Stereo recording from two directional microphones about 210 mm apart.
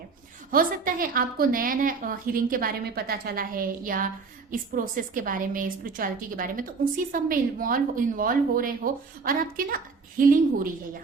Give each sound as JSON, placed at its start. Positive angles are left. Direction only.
{"t": 0.5, "sound": "a woman's voice", "side_deg": -45}